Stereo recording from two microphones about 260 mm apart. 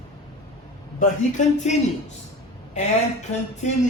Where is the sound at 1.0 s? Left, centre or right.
Left.